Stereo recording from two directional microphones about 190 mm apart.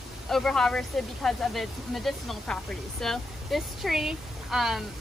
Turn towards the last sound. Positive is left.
turn(degrees=0)  # may be behind; listen again after turning